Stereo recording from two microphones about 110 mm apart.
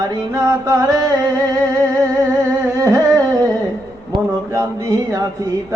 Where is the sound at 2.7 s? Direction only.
30° right (ahead or behind).